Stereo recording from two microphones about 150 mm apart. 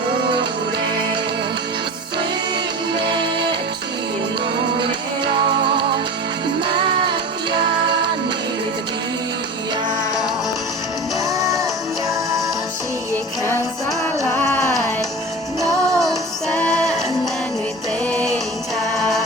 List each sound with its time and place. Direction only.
2.9 s music: 30° right (ahead or behind)
4.8 s music: 30° right (ahead or behind)
7.5 s music: 30° right (ahead or behind)
11.3 s music: 20° right (ahead or behind)
14.5 s music: 5° left (ahead or behind)
16.0 s music: centre (ahead or behind)
18.0 s music: 5° left (ahead or behind)